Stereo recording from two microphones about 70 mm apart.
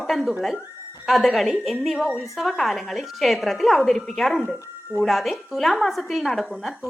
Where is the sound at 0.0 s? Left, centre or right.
Centre.